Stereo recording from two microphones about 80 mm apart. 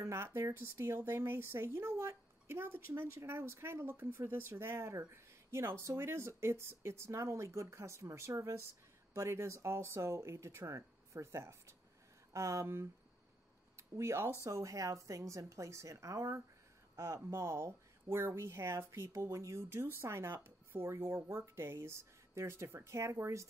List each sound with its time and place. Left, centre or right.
0.0 s speech: right